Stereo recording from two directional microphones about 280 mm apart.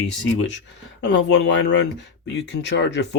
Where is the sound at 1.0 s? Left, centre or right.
Left.